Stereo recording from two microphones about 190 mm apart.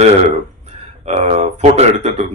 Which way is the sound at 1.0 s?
35° right (ahead or behind).